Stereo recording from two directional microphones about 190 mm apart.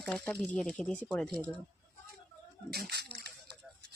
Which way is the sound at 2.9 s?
60° right (ahead or behind).